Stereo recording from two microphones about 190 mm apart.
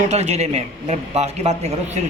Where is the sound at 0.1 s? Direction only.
35° right (ahead or behind).